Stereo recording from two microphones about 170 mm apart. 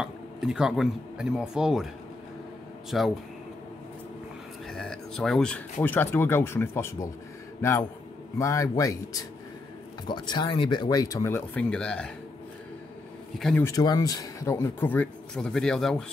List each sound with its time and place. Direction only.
0.0 s speech: 5° right (ahead or behind)
2.9 s speech: centre (ahead or behind)
4.6 s speech: 5° left (ahead or behind)
8.4 s speech: 20° left (ahead or behind)
13.4 s speech: 5° left (ahead or behind)
13.7 s speech: 20° left (ahead or behind); by 16.0 s 5° left (ahead or behind)